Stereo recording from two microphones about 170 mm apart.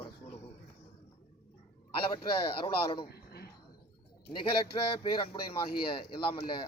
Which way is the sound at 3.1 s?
65° left (ahead or behind).